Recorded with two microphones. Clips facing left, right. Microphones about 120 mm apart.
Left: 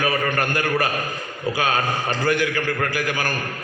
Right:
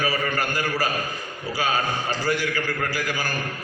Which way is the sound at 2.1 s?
55° left (ahead or behind).